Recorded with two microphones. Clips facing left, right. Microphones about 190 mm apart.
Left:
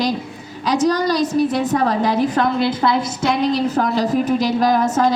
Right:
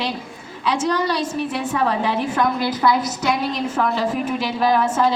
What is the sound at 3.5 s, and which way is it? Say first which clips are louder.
A woman's voice: left 4 dB; 35° left (ahead or behind).